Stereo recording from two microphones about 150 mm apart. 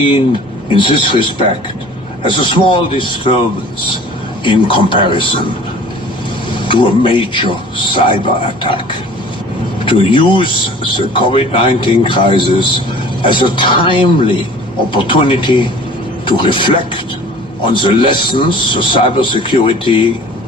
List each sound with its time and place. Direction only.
0.7 s speech: 35° left (ahead or behind)
4.4 s speech: 35° left (ahead or behind)
6.5 s speech: 35° left (ahead or behind)